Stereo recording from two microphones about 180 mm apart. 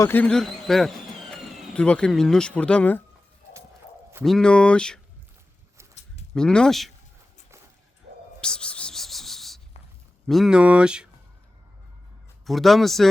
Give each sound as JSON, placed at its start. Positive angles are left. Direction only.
{"t": 0.0, "sound": "a man's voice", "side_deg": 10}
{"t": 4.2, "sound": "speech", "side_deg": 5}
{"t": 5.9, "sound": "livestock", "side_deg": 40}
{"t": 6.3, "sound": "speech", "side_deg": 5}
{"t": 8.1, "sound": "a sound", "side_deg": -70}
{"t": 8.4, "sound": "a sound", "side_deg": 5}
{"t": 10.2, "sound": "speech", "side_deg": 0}
{"t": 12.5, "sound": "speech", "side_deg": 0}